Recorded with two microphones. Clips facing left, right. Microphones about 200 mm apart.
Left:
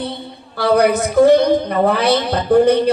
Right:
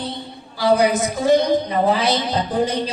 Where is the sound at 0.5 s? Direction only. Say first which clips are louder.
Left 3 dB; 60° left (ahead or behind).